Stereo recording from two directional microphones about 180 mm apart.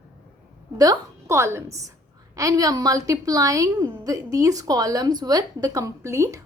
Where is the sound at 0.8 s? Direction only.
20° right (ahead or behind).